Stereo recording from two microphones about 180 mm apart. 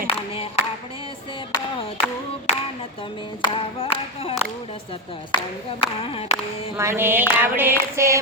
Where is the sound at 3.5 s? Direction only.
30° left (ahead or behind).